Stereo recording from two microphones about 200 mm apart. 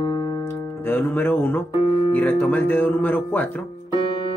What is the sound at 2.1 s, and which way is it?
Speech, 10° left (ahead or behind).